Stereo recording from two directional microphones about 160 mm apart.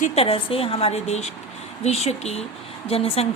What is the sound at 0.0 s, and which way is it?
Speech, 40° left (ahead or behind).